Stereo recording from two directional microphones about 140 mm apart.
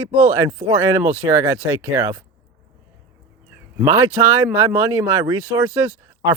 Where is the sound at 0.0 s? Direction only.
20° right (ahead or behind).